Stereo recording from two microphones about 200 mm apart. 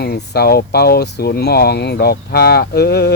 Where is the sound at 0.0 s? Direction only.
50° left (ahead or behind).